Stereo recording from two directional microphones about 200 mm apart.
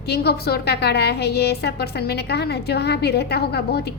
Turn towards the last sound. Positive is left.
turn(degrees=55)  # may be behind; listen again after turning